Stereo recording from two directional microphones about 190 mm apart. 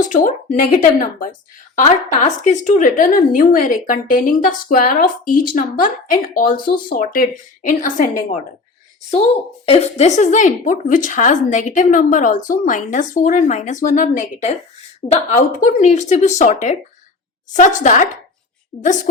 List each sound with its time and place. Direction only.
0.0 s a woman's voice: 45° left (ahead or behind)
9.0 s a woman's voice: 30° left (ahead or behind)